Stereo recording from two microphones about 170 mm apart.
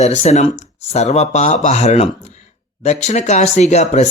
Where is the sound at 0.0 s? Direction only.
40° left (ahead or behind).